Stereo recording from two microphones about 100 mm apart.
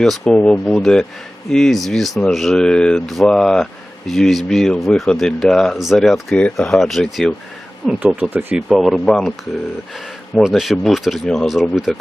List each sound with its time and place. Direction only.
0.0 s speech: 5° left (ahead or behind)
8.0 s speech: 15° right (ahead or behind)
8.5 s speech: centre (ahead or behind)